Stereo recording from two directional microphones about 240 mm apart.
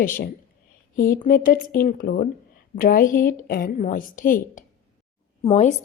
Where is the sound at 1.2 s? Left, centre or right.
Left.